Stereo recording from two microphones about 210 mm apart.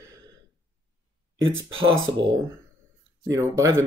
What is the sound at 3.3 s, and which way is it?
Speech, 15° right (ahead or behind).